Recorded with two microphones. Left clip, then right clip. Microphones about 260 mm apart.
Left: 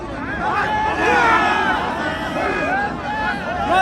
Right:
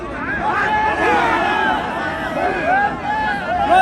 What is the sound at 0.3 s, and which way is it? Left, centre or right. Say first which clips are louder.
Hubbub: right 2 dB; left.